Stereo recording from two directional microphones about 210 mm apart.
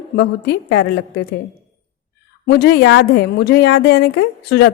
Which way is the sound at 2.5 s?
50° left (ahead or behind).